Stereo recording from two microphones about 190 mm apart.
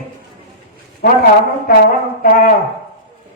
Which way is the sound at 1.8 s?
50° left (ahead or behind).